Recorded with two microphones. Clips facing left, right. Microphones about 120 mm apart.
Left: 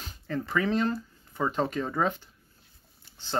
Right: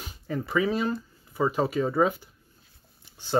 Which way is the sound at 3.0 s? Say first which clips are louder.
Right 1 dB; 15° right (ahead or behind).